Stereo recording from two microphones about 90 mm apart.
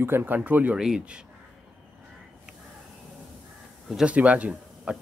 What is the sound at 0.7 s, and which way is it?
Speech, 5° right (ahead or behind).